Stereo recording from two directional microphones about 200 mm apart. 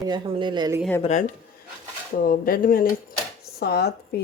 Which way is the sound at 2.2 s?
45° left (ahead or behind).